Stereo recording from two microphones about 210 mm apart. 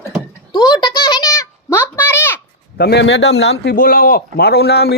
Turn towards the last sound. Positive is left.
turn(degrees=50)  # may be behind; listen again after turning